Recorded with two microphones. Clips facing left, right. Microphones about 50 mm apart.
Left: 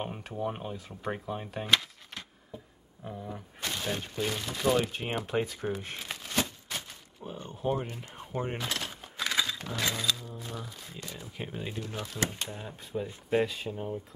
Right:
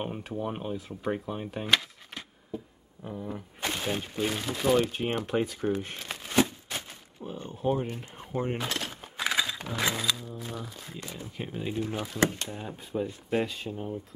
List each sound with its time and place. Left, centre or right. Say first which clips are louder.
0.0 s speech: right 1 dB; centre
3.6 s a sound: right 3 dB; right
3.9 s speech: right 2 dB; centre
6.2 s a sound: right 7 dB; centre
7.2 s speech: right 3 dB; centre
8.7 s speech: right 2 dB; centre
11.7 s speech: right 7 dB; centre
12.5 s speech: right 3 dB; centre